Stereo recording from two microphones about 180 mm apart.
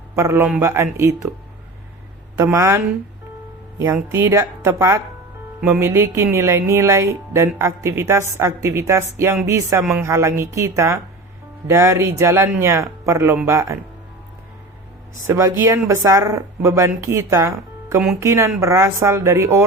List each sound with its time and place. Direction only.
0.2 s speech: 15° right (ahead or behind)
2.4 s speech: 15° right (ahead or behind)
15.3 s speech: 15° right (ahead or behind)